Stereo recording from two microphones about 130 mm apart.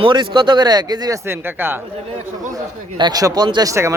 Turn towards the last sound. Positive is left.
turn(degrees=-20)  # may be behind; listen again after turning